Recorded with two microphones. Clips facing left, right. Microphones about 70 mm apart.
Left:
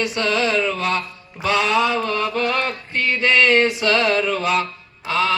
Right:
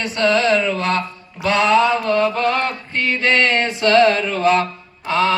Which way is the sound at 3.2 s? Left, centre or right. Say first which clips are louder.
Left 2 dB; centre.